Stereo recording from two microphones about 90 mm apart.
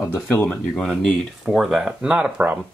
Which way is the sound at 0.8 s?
Centre (ahead or behind).